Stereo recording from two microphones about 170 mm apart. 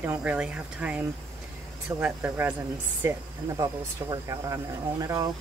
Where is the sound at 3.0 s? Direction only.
20° right (ahead or behind).